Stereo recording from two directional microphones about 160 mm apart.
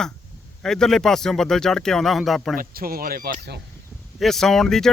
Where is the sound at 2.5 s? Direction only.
65° right (ahead or behind).